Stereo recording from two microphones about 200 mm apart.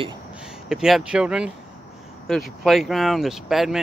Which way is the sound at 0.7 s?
Centre (ahead or behind).